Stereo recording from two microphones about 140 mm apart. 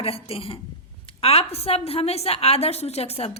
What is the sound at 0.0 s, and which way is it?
A woman's voice, 45° left (ahead or behind).